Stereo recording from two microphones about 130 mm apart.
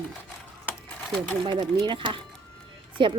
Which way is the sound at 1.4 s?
40° right (ahead or behind).